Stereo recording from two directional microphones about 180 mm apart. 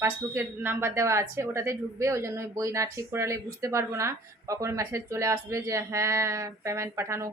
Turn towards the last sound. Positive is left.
turn(degrees=-15)  # may be behind; listen again after turning